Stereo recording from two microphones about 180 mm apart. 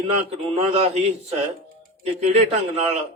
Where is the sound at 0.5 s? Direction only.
35° right (ahead or behind).